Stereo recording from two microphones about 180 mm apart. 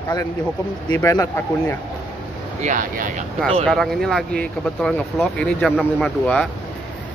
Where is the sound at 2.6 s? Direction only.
45° right (ahead or behind).